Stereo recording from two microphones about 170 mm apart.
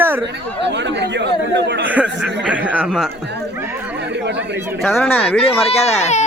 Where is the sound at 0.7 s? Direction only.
90° right.